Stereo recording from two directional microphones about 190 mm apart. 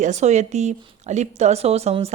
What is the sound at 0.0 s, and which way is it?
Speech, 35° right (ahead or behind).